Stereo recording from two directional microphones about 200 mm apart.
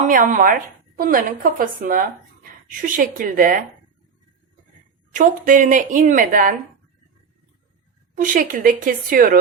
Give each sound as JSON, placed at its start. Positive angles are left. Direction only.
{"t": 0.1, "sound": "a woman's voice", "side_deg": -40}
{"t": 5.1, "sound": "a woman's voice", "side_deg": -40}
{"t": 8.1, "sound": "a woman's voice", "side_deg": -40}